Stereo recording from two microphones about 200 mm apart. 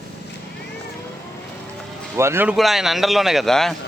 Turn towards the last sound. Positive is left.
turn(degrees=0)  # may be behind; listen again after turning